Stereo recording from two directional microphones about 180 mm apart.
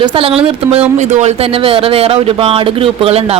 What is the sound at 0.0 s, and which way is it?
A woman's voice, 30° right (ahead or behind).